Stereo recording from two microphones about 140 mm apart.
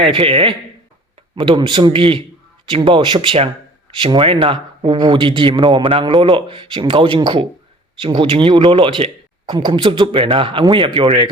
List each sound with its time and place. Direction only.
0.0 s speech: 40° right (ahead or behind)